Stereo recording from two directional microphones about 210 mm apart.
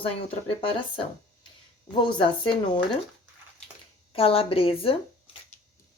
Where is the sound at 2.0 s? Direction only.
20° left (ahead or behind).